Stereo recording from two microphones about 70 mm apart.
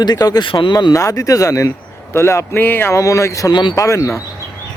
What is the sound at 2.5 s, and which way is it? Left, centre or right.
Speech, left.